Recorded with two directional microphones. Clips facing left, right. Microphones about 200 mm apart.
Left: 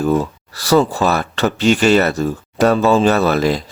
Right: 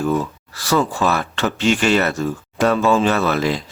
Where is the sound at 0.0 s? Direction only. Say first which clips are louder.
Left 3 dB; 40° left (ahead or behind).